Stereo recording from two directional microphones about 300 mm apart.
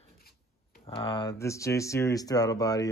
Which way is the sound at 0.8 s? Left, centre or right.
Centre.